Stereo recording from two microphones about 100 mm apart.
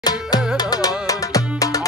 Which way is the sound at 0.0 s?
45° left (ahead or behind).